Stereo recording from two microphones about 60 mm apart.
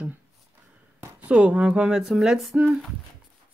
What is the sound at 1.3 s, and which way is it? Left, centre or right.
Speech, centre.